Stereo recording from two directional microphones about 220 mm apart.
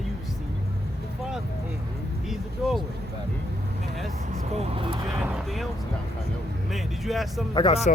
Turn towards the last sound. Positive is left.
turn(degrees=20)  # may be behind; listen again after turning